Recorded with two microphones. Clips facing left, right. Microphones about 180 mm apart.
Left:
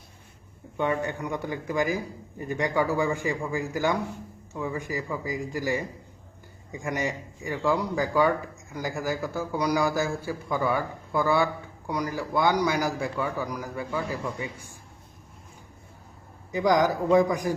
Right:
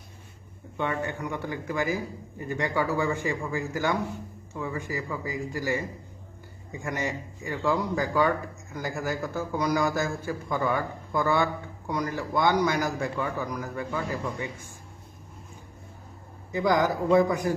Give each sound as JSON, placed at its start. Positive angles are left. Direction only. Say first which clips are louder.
{"t": 0.8, "sound": "speech", "louder": "left 2 dB", "side_deg": 15}
{"t": 16.5, "sound": "speech", "louder": "left 2 dB", "side_deg": 15}